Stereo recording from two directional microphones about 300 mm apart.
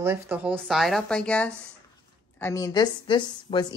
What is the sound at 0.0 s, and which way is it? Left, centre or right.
A woman's voice, centre.